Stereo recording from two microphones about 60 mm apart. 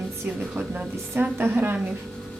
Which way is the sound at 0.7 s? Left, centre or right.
Right.